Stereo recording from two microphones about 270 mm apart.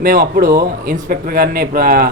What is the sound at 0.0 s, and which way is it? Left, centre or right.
Speech, right.